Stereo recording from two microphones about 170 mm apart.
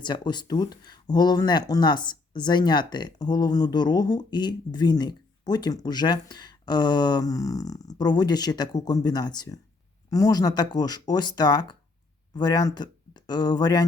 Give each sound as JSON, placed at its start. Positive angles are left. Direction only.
{"t": 0.0, "sound": "speech", "side_deg": 25}